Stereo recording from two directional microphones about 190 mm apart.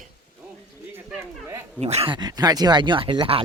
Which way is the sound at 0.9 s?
15° right (ahead or behind).